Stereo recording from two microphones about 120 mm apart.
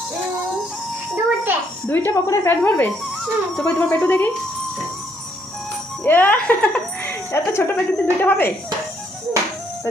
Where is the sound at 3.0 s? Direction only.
Centre (ahead or behind).